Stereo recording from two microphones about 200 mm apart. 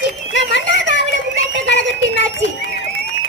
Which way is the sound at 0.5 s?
65° left (ahead or behind).